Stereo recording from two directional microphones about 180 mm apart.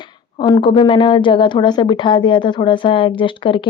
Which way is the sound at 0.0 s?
25° left (ahead or behind).